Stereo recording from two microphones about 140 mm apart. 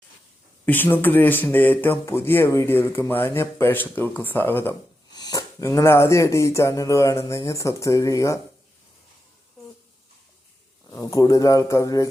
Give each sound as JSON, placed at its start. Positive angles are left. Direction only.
{"t": 0.6, "sound": "speech", "side_deg": 15}
{"t": 5.1, "sound": "speech", "side_deg": 30}
{"t": 10.9, "sound": "speech", "side_deg": 25}